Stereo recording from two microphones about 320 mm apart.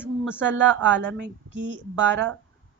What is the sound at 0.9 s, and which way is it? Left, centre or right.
Speech, right.